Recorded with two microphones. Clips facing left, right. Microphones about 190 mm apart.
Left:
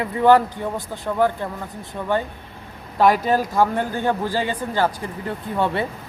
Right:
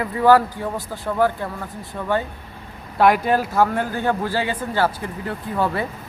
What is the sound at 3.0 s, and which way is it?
Speech, 10° right (ahead or behind).